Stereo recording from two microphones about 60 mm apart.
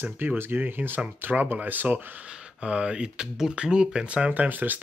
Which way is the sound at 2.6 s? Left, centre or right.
Centre.